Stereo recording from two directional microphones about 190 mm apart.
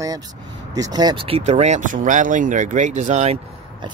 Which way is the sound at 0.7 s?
20° right (ahead or behind).